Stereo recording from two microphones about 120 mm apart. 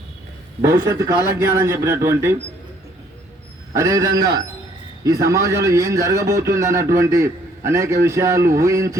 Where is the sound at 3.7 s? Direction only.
25° right (ahead or behind).